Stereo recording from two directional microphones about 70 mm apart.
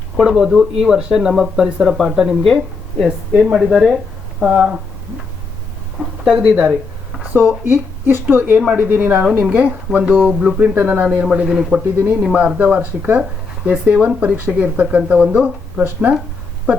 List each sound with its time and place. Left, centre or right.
0.2 s speech: centre
7.3 s speech: right
11.0 s speech: centre